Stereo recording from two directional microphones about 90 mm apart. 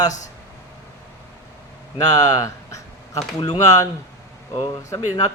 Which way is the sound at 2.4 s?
35° left (ahead or behind).